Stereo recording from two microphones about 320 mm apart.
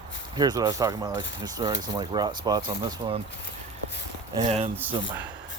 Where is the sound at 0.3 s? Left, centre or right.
Centre.